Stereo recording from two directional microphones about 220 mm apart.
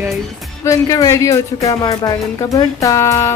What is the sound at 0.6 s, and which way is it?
Speech, 15° left (ahead or behind).